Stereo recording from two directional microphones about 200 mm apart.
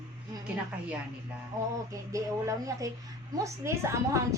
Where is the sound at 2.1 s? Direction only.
15° right (ahead or behind).